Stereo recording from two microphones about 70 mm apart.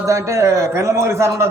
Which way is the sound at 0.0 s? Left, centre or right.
Right.